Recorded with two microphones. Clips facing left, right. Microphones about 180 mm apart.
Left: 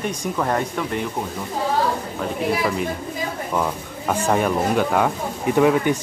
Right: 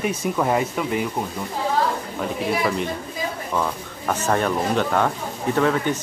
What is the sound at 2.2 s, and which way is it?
Speech, centre (ahead or behind).